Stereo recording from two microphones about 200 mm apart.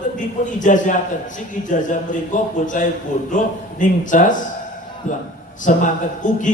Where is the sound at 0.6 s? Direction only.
40° left (ahead or behind).